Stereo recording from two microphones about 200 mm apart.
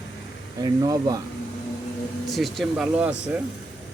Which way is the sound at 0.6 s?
20° right (ahead or behind).